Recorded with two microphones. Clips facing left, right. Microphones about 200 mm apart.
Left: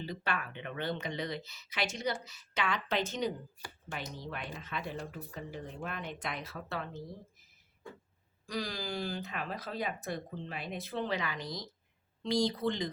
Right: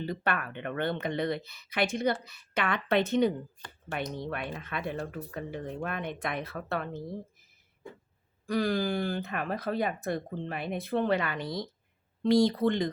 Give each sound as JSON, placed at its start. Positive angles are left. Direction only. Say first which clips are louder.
{"t": 0.0, "sound": "speech", "louder": "right 5 dB", "side_deg": -55}
{"t": 8.4, "sound": "speech", "louder": "right 10 dB", "side_deg": -55}